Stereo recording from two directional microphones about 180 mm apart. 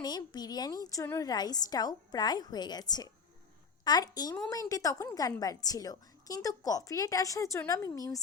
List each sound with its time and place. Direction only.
0.0 s a woman's voice: 20° left (ahead or behind)